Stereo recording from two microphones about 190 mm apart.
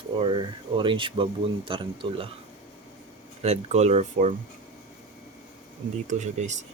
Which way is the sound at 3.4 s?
35° right (ahead or behind).